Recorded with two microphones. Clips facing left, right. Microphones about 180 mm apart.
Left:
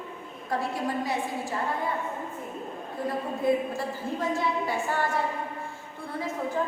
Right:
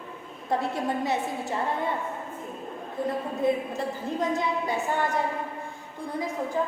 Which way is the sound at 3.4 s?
20° right (ahead or behind).